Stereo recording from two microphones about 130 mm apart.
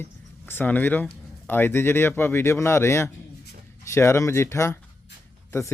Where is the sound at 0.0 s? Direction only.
15° left (ahead or behind).